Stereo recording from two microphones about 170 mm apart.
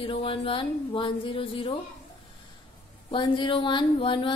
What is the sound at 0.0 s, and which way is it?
A woman's voice, 30° left (ahead or behind).